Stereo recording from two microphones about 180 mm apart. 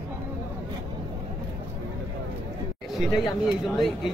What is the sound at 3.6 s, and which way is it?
Speech, centre (ahead or behind).